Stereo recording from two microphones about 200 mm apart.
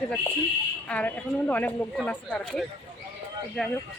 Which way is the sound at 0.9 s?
5° left (ahead or behind).